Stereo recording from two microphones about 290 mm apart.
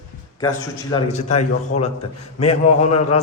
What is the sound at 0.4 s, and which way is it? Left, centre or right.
A man's voice, centre.